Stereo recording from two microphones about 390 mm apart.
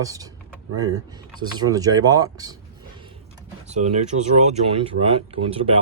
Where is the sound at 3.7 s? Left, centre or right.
Centre.